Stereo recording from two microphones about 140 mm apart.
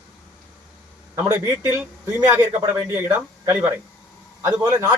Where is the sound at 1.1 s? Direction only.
20° right (ahead or behind).